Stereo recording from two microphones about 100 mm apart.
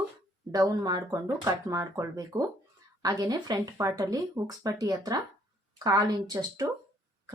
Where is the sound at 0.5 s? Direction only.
35° right (ahead or behind).